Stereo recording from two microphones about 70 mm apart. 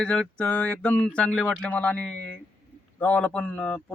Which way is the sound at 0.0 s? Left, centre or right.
Centre.